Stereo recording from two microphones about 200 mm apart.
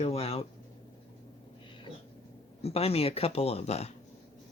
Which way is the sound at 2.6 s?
30° left (ahead or behind).